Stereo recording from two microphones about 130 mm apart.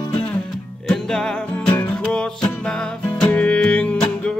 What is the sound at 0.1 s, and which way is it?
Music, 10° left (ahead or behind).